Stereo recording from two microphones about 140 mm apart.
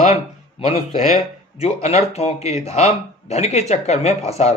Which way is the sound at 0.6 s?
55° left (ahead or behind).